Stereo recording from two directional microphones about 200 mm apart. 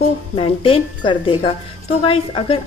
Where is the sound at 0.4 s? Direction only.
25° left (ahead or behind).